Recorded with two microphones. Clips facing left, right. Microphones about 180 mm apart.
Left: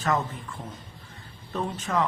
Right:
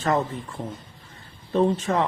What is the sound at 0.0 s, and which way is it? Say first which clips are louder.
Speech: right 4 dB; 30° right (ahead or behind).